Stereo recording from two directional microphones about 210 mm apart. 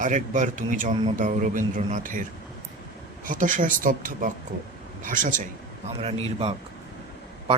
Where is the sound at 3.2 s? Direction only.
40° right (ahead or behind).